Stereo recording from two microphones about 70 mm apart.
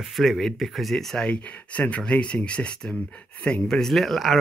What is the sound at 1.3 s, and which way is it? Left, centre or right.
Speech, centre.